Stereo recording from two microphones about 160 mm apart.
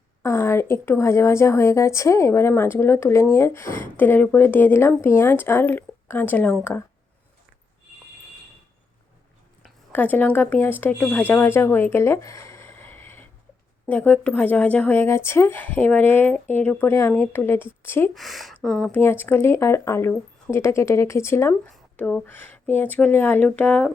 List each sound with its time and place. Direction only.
0.2 s speech: 15° left (ahead or behind)
9.9 s speech: 10° left (ahead or behind)
18.1 s speech: centre (ahead or behind)
18.9 s speech: 15° left (ahead or behind)